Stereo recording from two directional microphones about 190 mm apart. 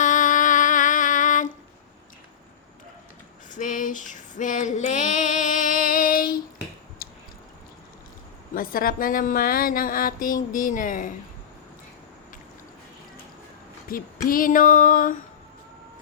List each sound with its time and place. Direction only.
0.0 s music: 45° left (ahead or behind)
3.5 s female singing: 45° left (ahead or behind)
7.0 s squish: 50° left (ahead or behind)
8.5 s speech: 50° left (ahead or behind)
13.8 s speech: 50° left (ahead or behind)